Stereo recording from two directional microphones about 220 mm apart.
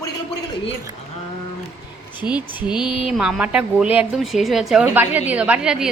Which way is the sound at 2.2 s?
5° right (ahead or behind).